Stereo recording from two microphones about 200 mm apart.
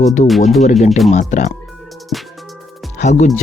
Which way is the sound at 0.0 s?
35° left (ahead or behind).